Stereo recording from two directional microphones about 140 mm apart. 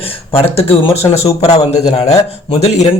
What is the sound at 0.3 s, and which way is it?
A man's voice, 45° left (ahead or behind).